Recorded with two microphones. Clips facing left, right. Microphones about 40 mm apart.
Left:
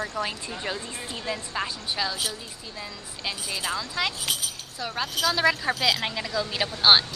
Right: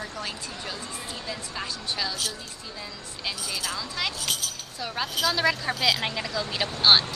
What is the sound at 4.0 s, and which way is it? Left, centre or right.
Speech, centre.